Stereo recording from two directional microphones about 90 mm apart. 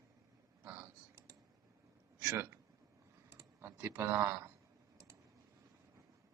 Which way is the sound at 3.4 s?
30° right (ahead or behind).